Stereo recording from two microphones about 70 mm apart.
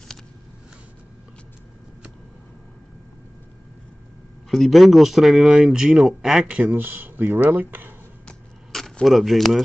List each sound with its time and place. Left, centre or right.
4.5 s speech: centre
6.4 s speech: right
9.0 s speech: centre